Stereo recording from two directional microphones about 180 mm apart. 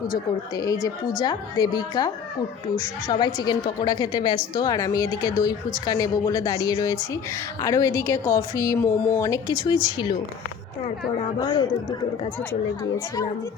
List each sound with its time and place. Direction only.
0.5 s a woman's voice: 20° left (ahead or behind)
11.3 s a woman's voice: 20° left (ahead or behind)